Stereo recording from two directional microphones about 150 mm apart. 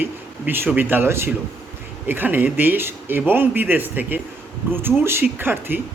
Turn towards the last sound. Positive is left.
turn(degrees=-15)  # may be behind; listen again after turning